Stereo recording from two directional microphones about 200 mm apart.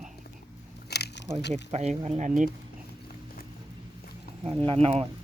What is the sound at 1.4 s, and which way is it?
Speech, 60° left (ahead or behind).